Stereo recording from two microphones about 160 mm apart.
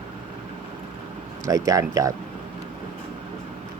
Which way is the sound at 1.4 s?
20° right (ahead or behind).